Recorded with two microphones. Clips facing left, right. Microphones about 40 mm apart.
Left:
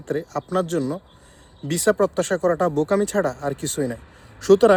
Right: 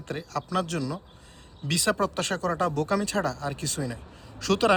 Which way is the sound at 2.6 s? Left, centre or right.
Left.